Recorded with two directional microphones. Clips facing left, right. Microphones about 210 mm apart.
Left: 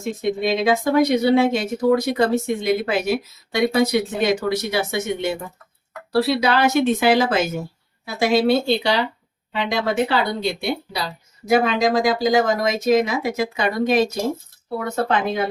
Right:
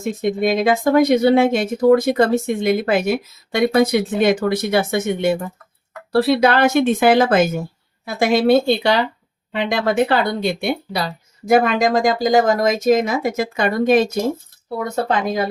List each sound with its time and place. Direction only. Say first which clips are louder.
0.2 s speech: right 3 dB; 50° right (ahead or behind)
15.0 s speech: right 1 dB; 40° right (ahead or behind)